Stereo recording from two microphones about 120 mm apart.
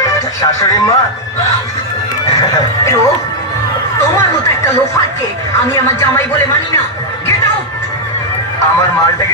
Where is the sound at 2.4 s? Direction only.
30° left (ahead or behind).